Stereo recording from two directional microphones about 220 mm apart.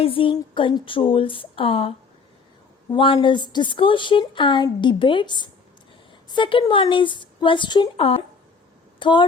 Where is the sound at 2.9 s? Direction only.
25° left (ahead or behind).